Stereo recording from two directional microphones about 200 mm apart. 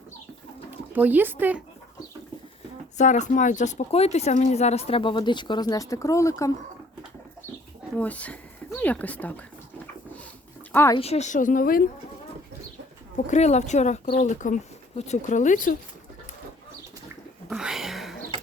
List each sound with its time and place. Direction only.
0.7 s speech: 10° right (ahead or behind)
3.0 s speech: 40° left (ahead or behind); by 6.5 s 15° left (ahead or behind)
7.9 s speech: 5° left (ahead or behind)
10.7 s speech: 10° left (ahead or behind)
10.9 s speech: 30° left (ahead or behind)
13.1 s speech: 35° left (ahead or behind)
17.5 s a sound: 5° right (ahead or behind)